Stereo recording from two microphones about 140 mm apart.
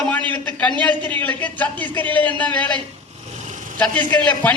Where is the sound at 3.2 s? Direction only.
55° right (ahead or behind).